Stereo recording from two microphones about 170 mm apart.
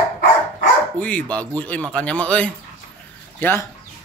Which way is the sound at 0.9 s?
5° left (ahead or behind).